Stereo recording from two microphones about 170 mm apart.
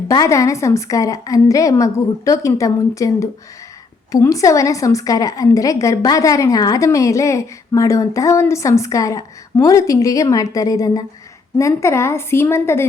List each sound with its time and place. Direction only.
0.1 s a woman's voice: 20° left (ahead or behind)